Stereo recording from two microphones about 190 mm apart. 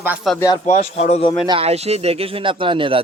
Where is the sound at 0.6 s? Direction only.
35° left (ahead or behind).